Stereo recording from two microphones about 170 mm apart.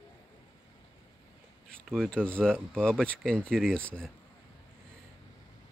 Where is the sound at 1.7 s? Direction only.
Centre (ahead or behind).